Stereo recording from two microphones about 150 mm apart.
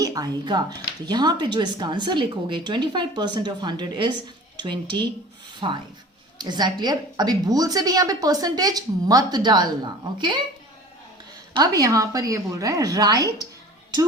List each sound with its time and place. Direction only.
0.0 s a woman's voice: 25° right (ahead or behind)
11.5 s a woman's voice: 25° right (ahead or behind)